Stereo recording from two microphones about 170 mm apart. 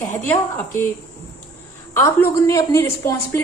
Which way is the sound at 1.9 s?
15° left (ahead or behind).